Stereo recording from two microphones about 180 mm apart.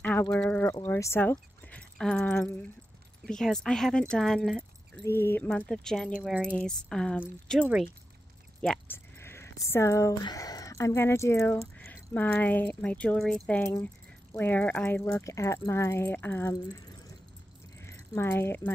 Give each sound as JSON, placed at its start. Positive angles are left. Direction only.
{"t": 0.0, "sound": "speech", "side_deg": 10}
{"t": 5.0, "sound": "speech", "side_deg": 15}
{"t": 8.5, "sound": "speech", "side_deg": 10}
{"t": 17.7, "sound": "keys jangling", "side_deg": 15}